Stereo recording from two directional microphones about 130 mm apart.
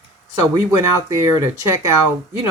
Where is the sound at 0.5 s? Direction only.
20° right (ahead or behind).